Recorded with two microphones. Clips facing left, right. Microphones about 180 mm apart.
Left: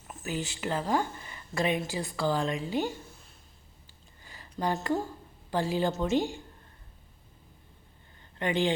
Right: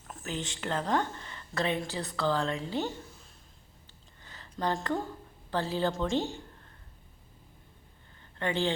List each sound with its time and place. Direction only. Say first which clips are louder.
0.1 s speech: left 2 dB; 10° left (ahead or behind)
4.2 s a sound: left 1 dB; 10° left (ahead or behind)
5.5 s a woman's voice: left 2 dB; 15° left (ahead or behind)
8.4 s speech: left 2 dB; 15° left (ahead or behind)